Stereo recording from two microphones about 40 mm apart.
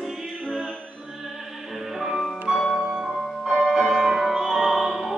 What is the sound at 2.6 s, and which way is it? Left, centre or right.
Music, centre.